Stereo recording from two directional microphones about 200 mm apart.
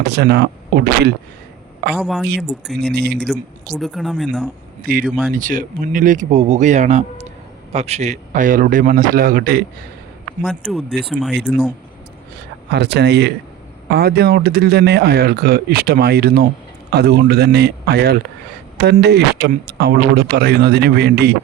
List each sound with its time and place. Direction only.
0.0 s speech: 55° right (ahead or behind)
2.0 s speech: centre (ahead or behind)
2.8 s speech: 55° right (ahead or behind)
3.2 s speech: centre (ahead or behind)
4.8 s speech: 45° right (ahead or behind)
5.0 s speech: 5° right (ahead or behind)
5.3 s speech: 40° right (ahead or behind)
10.4 s speech: centre (ahead or behind)
12.7 s speech: 55° right (ahead or behind)